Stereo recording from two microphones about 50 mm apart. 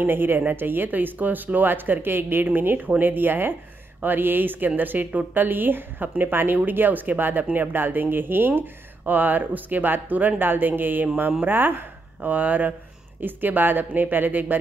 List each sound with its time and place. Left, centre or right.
0.0 s speech: right